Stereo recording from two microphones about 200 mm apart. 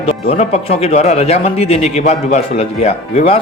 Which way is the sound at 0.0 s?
30° left (ahead or behind).